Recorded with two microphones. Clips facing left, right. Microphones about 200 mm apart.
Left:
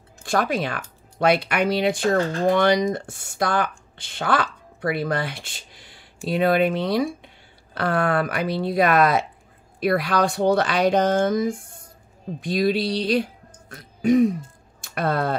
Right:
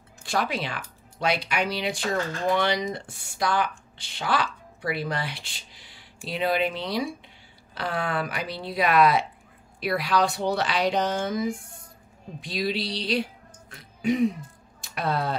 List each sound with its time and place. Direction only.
0.2 s speech: 50° left (ahead or behind)